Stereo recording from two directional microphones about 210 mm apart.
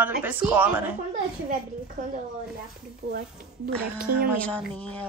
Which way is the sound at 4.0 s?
Centre (ahead or behind).